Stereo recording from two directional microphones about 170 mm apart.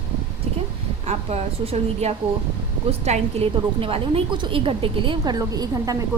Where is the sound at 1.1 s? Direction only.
40° right (ahead or behind); by 5.9 s 20° right (ahead or behind).